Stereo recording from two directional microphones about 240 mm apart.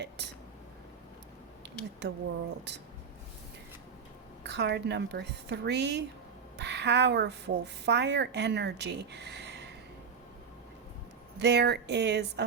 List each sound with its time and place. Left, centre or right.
1.6 s a sound: right
4.4 s a woman's voice: right
11.3 s a woman's voice: right